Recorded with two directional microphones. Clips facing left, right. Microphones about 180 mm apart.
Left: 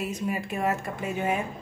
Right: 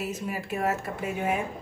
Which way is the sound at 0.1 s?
5° right (ahead or behind).